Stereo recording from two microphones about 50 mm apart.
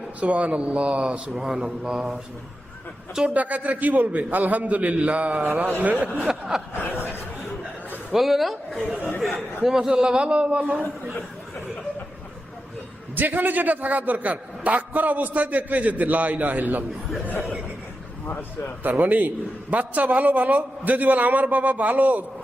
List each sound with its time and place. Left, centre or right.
0.2 s a man's voice: right
1.4 s a sound: centre
3.2 s a man's voice: right
6.2 s a sound: centre
6.7 s speech: left
8.1 s speech: centre
9.7 s a man's voice: centre; by 11.1 s right
13.1 s a man's voice: right
18.8 s a man's voice: right